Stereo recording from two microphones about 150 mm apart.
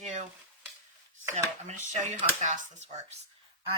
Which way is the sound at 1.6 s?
50° right (ahead or behind).